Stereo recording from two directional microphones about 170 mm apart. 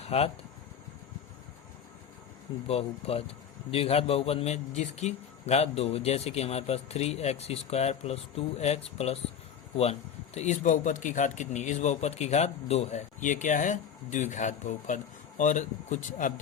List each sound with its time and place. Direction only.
0.0 s speech: 35° left (ahead or behind)
2.6 s a man's voice: 35° left (ahead or behind)